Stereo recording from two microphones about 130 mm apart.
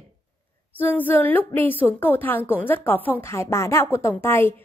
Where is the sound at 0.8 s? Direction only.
15° left (ahead or behind).